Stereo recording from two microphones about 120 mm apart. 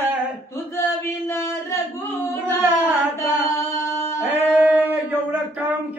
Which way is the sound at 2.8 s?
15° right (ahead or behind).